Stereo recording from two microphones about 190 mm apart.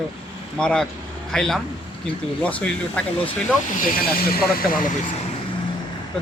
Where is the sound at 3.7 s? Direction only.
45° left (ahead or behind).